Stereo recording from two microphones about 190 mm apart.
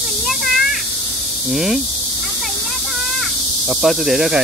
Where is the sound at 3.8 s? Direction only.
Centre (ahead or behind).